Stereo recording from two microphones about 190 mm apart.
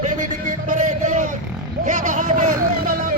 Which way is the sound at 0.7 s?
40° right (ahead or behind).